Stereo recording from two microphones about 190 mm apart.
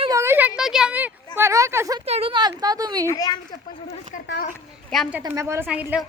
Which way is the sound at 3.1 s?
20° left (ahead or behind).